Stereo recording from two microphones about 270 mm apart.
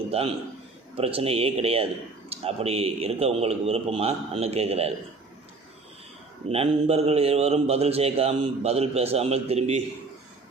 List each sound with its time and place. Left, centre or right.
0.1 s a man's voice: right
6.5 s a man's voice: right